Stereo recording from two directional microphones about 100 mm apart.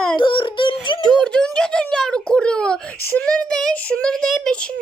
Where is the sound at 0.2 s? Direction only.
55° left (ahead or behind).